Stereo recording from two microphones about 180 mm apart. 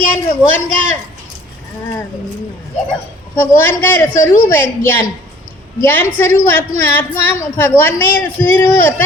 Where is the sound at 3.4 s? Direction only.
10° left (ahead or behind).